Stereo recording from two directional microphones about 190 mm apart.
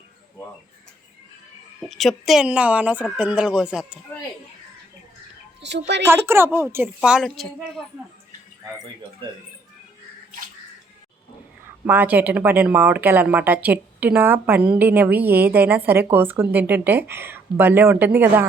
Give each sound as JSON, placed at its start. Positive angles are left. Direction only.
{"t": 1.9, "sound": "speech", "side_deg": 0}
{"t": 5.6, "sound": "a woman's voice", "side_deg": -65}
{"t": 6.1, "sound": "speech", "side_deg": -10}
{"t": 11.9, "sound": "speech", "side_deg": -10}